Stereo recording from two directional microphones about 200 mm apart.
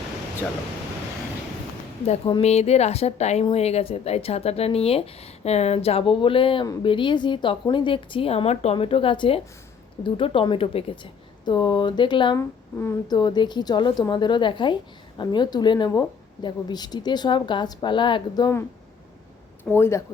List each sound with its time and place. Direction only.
2.0 s a woman's voice: 30° left (ahead or behind)
19.7 s speech: 10° left (ahead or behind)